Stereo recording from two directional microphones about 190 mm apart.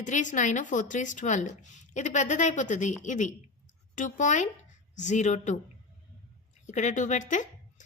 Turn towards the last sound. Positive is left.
turn(degrees=40)  # may be behind; listen again after turning